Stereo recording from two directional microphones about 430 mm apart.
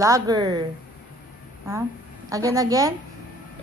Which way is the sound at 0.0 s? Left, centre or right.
Centre.